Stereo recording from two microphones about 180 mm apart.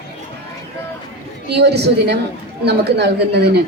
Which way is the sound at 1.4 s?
65° right (ahead or behind).